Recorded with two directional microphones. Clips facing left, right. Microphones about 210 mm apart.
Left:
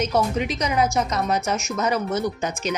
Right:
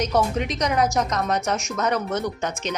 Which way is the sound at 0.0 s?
Centre (ahead or behind).